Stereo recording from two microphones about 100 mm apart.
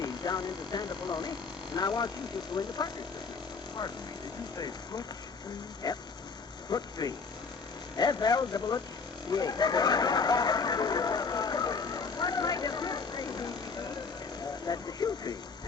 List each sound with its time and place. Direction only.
0.0 s speech: 45° left (ahead or behind)
4.5 s speech: 40° left (ahead or behind)
9.3 s a sound: 40° left (ahead or behind)
14.7 s speech: 40° left (ahead or behind)